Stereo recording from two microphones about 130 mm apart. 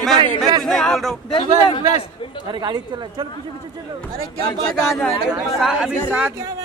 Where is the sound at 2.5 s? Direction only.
35° right (ahead or behind).